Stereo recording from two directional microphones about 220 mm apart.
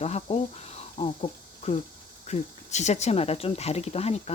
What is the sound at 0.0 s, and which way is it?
Speech, 30° left (ahead or behind).